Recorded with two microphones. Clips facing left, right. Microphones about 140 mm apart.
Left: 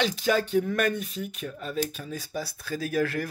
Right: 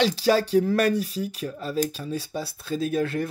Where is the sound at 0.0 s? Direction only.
35° right (ahead or behind).